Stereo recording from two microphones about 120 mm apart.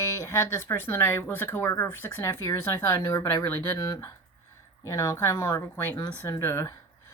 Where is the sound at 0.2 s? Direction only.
25° left (ahead or behind).